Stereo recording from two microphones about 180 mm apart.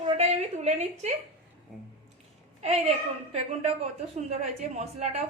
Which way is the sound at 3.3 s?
35° right (ahead or behind).